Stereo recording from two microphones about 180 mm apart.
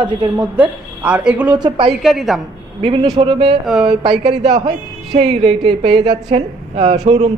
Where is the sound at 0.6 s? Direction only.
5° right (ahead or behind).